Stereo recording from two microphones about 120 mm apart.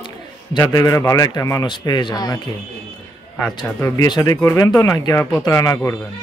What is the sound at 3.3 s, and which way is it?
Speech, 15° left (ahead or behind).